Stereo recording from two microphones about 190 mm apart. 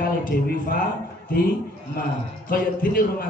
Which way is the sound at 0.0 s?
45° left (ahead or behind).